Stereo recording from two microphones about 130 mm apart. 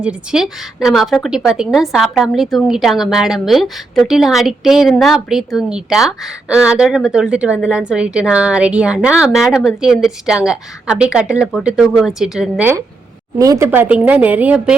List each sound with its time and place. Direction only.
0.0 s a woman's voice: 5° right (ahead or behind)
13.4 s speech: 30° right (ahead or behind)
13.7 s a woman's voice: 15° right (ahead or behind)